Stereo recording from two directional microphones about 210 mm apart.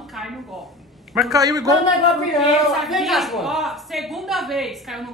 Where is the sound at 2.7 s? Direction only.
Centre (ahead or behind).